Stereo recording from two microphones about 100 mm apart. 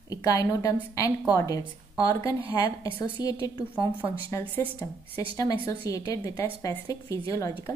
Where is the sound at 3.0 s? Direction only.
40° left (ahead or behind).